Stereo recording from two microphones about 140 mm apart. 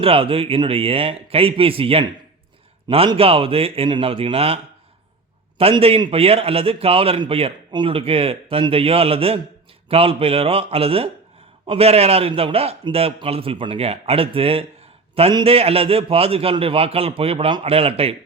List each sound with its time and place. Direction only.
0.0 s a man's voice: 40° right (ahead or behind)